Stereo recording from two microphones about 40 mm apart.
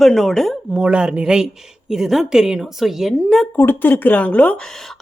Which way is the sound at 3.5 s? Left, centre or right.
Left.